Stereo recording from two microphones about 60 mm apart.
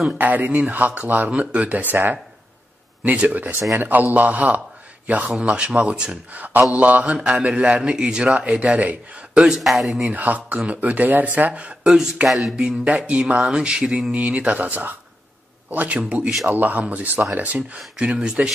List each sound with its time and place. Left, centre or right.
0.2 s mantra: right
1.9 s speech: right
3.0 s speech: centre
3.8 s mantra: right
5.0 s a man's voice: right
5.4 s mantra: centre
9.4 s speech: centre
10.0 s mantra: right
11.8 s speech: centre
12.5 s mantra: centre